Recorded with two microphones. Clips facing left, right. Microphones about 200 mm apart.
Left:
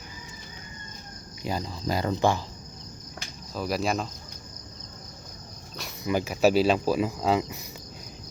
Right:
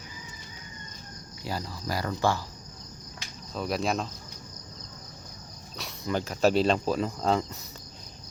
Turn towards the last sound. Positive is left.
turn(degrees=10)  # may be behind; listen again after turning